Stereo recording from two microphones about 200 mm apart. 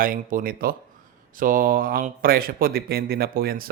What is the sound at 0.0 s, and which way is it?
Speech, 45° right (ahead or behind).